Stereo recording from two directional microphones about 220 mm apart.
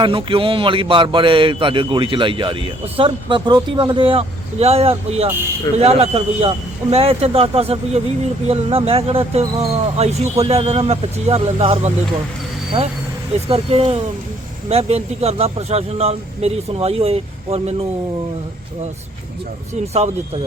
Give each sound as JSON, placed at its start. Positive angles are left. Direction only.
{"t": 0.0, "sound": "a man's voice", "side_deg": -25}
{"t": 13.5, "sound": "a man's voice", "side_deg": -25}
{"t": 19.9, "sound": "a man's voice", "side_deg": -25}